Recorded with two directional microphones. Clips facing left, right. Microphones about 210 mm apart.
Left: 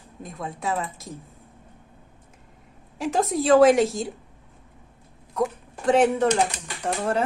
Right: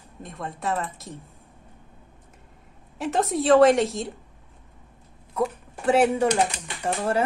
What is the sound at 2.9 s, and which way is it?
A woman's voice, centre (ahead or behind).